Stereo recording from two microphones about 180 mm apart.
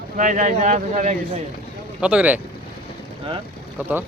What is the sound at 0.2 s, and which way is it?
Speech, 45° right (ahead or behind).